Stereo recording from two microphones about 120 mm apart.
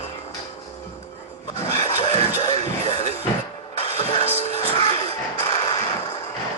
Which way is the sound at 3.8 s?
50° left (ahead or behind).